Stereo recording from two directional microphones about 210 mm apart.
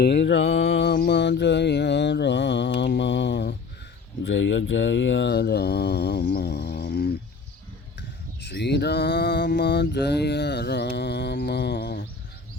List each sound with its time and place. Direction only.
0.0 s mantra: 55° left (ahead or behind)
8.4 s mantra: 50° left (ahead or behind)